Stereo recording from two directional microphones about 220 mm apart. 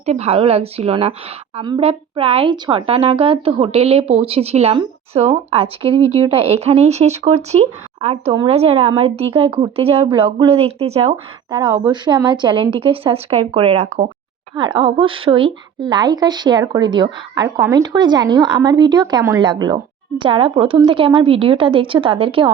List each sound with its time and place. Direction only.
0.0 s speech: 30° right (ahead or behind)